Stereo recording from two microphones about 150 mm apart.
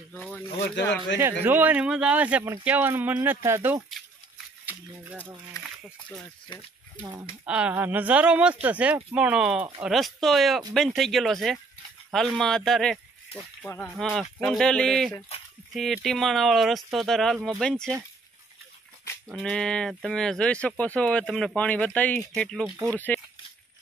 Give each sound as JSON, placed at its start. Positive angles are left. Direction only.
{"t": 0.1, "sound": "speech", "side_deg": 10}
{"t": 1.2, "sound": "speech", "side_deg": -15}
{"t": 4.6, "sound": "a sound", "side_deg": -10}
{"t": 6.0, "sound": "speech", "side_deg": 5}
{"t": 7.4, "sound": "speech", "side_deg": -5}
{"t": 13.8, "sound": "speech", "side_deg": 0}
{"t": 19.2, "sound": "speech", "side_deg": 5}
{"t": 22.7, "sound": "speech", "side_deg": -15}
{"t": 22.9, "sound": "speech", "side_deg": 10}